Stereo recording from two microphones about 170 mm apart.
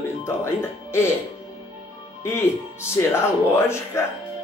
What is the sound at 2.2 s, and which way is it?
Speech, 15° left (ahead or behind).